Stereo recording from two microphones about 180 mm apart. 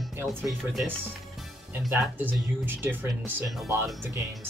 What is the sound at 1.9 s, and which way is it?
Speech, 10° right (ahead or behind).